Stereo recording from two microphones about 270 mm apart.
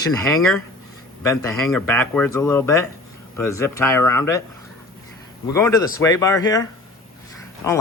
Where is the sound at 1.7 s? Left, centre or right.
Centre.